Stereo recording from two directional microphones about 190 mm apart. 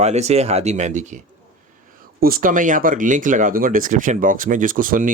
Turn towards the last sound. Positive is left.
turn(degrees=-45)  # may be behind; listen again after turning